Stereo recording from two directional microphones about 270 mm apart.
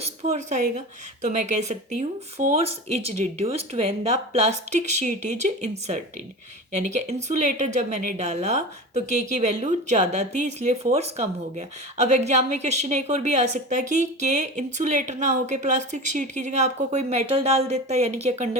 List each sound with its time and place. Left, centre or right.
0.0 s a woman's voice: right